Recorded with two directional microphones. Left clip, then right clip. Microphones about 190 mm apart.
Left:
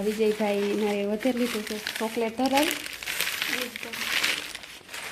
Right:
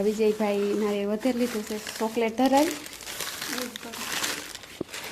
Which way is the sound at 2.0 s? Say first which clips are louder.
Right 3 dB; 5° right (ahead or behind).